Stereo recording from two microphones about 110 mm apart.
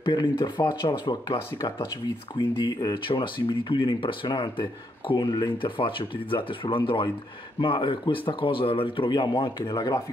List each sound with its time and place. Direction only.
0.0 s speech: 45° left (ahead or behind)